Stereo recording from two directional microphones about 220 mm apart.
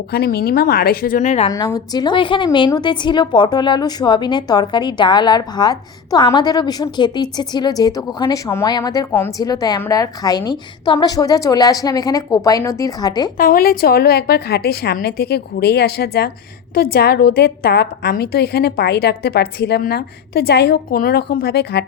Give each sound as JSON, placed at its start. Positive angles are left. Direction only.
{"t": 0.1, "sound": "a woman's voice", "side_deg": 45}
{"t": 1.5, "sound": "a woman's voice", "side_deg": 15}
{"t": 13.3, "sound": "a woman's voice", "side_deg": 40}